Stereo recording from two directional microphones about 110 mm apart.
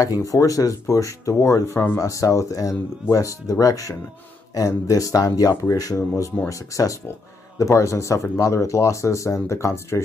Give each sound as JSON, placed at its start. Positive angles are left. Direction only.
{"t": 0.0, "sound": "speech", "side_deg": 30}